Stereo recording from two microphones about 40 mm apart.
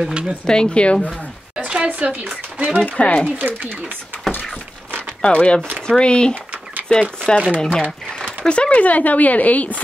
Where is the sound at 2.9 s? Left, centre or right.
Left.